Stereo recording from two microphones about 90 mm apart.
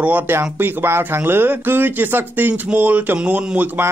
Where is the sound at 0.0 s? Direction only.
20° right (ahead or behind).